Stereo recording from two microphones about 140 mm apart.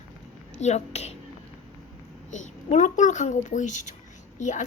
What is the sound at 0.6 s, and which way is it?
Speech, 50° left (ahead or behind).